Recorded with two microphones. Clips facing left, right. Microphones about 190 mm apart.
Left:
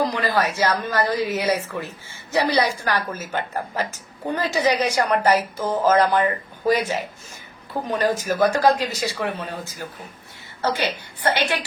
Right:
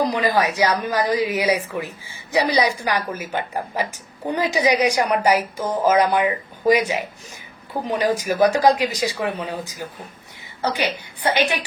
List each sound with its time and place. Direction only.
0.0 s a woman's voice: 15° right (ahead or behind)